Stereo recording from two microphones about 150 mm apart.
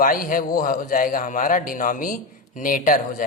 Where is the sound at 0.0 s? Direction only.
70° left (ahead or behind).